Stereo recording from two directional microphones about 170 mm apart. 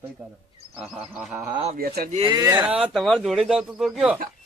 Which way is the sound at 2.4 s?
20° right (ahead or behind).